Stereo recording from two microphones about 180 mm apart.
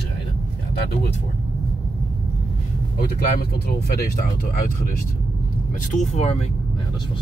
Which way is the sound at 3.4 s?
60° left (ahead or behind).